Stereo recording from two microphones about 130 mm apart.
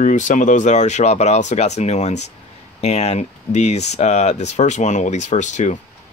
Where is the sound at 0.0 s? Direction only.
75° left (ahead or behind).